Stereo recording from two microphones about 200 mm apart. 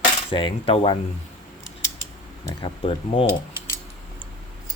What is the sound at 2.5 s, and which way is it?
Speech, 20° left (ahead or behind).